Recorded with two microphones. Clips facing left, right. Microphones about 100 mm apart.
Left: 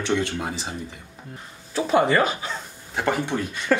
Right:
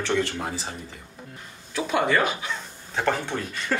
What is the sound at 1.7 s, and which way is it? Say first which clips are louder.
Speech: left 4 dB; 35° left (ahead or behind).